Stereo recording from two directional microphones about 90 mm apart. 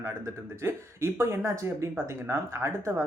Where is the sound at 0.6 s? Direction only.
30° right (ahead or behind).